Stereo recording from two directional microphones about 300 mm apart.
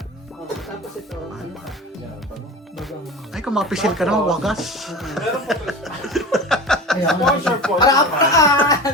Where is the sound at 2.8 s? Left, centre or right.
Centre.